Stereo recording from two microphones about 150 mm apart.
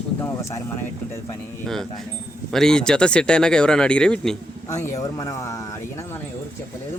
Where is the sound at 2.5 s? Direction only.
5° left (ahead or behind).